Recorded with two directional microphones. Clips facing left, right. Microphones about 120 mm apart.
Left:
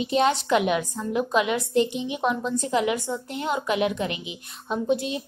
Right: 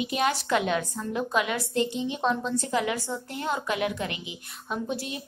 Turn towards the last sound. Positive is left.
turn(degrees=20)  # may be behind; listen again after turning